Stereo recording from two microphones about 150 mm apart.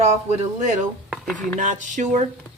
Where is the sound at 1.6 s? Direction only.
55° right (ahead or behind).